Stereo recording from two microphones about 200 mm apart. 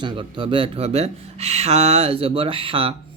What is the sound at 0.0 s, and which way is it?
Speech, 25° right (ahead or behind).